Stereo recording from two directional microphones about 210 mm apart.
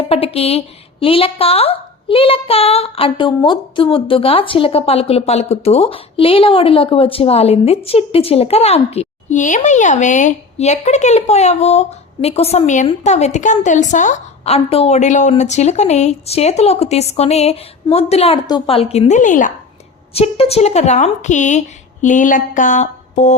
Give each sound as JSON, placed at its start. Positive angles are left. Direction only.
{"t": 0.1, "sound": "a woman's voice", "side_deg": 25}